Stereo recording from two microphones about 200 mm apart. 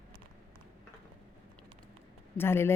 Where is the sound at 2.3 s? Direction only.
10° left (ahead or behind).